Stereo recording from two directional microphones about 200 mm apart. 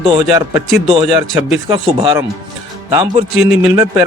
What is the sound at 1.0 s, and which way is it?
Speech, 5° right (ahead or behind).